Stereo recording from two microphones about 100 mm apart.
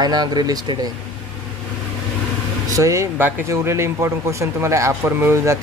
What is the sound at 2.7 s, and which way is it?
Speech, 30° right (ahead or behind).